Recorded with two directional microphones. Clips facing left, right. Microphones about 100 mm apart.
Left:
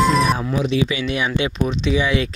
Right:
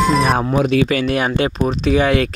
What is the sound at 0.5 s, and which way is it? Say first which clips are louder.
Speech: right 5 dB; 55° right (ahead or behind).